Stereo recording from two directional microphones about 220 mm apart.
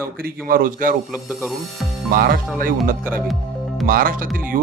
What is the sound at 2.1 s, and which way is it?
Speech, 45° right (ahead or behind).